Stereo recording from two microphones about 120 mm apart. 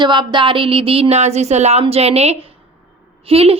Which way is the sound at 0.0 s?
40° right (ahead or behind).